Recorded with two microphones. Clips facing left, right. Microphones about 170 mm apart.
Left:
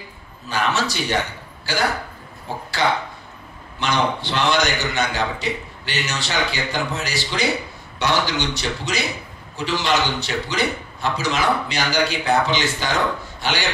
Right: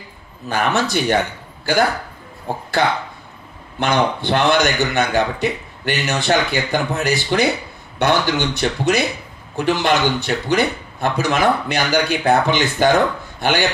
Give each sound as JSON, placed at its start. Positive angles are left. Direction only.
{"t": 0.5, "sound": "a man's voice", "side_deg": -55}
{"t": 3.8, "sound": "a man's voice", "side_deg": -55}